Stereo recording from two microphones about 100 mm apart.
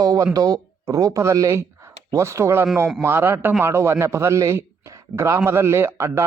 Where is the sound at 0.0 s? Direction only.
35° right (ahead or behind).